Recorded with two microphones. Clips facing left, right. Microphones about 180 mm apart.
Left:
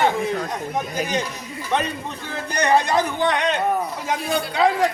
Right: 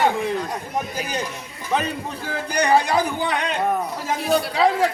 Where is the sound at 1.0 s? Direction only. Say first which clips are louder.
Left 4 dB; 45° left (ahead or behind).